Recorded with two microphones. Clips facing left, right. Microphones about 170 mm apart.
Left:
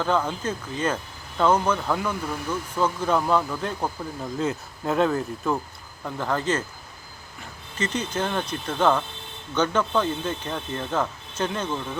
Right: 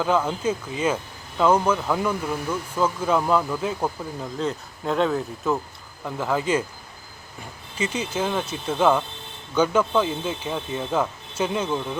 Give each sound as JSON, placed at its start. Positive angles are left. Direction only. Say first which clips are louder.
{"t": 0.0, "sound": "speech", "louder": "right 2 dB", "side_deg": -5}
{"t": 7.8, "sound": "speech", "louder": "right 1 dB", "side_deg": -10}